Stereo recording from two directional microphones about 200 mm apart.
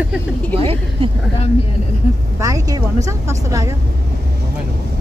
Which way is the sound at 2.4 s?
15° right (ahead or behind).